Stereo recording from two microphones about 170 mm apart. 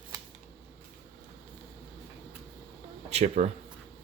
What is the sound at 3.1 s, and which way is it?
Speech, 40° right (ahead or behind).